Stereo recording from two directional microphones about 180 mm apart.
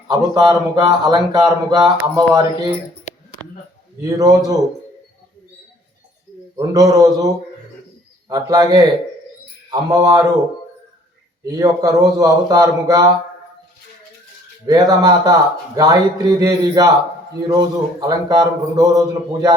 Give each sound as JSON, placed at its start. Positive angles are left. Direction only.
{"t": 0.1, "sound": "speech", "side_deg": -20}
{"t": 4.0, "sound": "speech", "side_deg": -20}
{"t": 6.6, "sound": "speech", "side_deg": -20}
{"t": 11.4, "sound": "speech", "side_deg": -20}
{"t": 14.7, "sound": "speech", "side_deg": -20}